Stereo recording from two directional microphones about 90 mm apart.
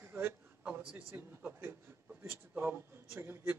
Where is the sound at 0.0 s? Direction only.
20° right (ahead or behind).